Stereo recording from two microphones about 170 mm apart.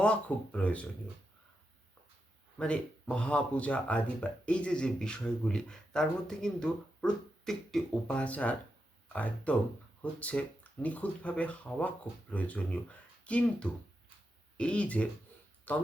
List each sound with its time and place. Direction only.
0.0 s speech: 5° left (ahead or behind)
2.6 s speech: 5° left (ahead or behind)